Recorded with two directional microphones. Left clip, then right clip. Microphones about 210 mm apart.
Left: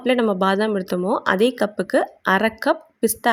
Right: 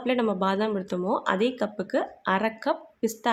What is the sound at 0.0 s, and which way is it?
Speech, 30° left (ahead or behind).